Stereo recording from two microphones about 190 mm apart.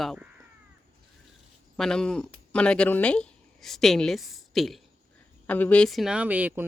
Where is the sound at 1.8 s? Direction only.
5° left (ahead or behind).